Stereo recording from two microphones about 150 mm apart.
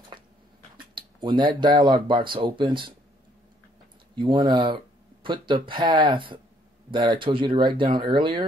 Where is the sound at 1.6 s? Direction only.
30° right (ahead or behind).